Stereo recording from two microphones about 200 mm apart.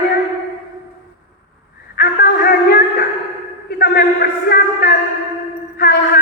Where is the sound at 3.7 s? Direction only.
50° left (ahead or behind).